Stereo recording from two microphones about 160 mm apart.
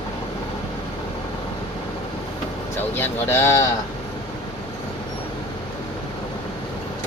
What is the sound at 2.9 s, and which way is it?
Speech, 15° left (ahead or behind).